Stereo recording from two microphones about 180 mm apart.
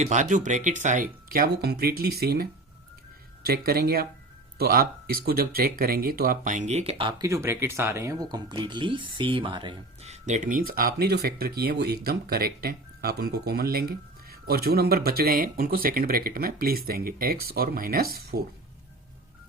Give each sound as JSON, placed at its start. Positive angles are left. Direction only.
{"t": 0.0, "sound": "speech", "side_deg": -40}
{"t": 7.2, "sound": "speech", "side_deg": -15}
{"t": 10.1, "sound": "speech", "side_deg": -40}